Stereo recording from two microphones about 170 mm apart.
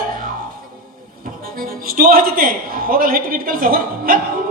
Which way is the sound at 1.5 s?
60° right (ahead or behind).